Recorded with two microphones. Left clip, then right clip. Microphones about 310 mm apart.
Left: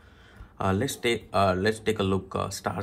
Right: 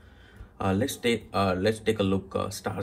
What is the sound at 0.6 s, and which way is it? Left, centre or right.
Speech, left.